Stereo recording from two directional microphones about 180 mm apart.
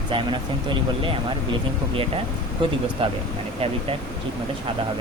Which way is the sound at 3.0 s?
30° right (ahead or behind).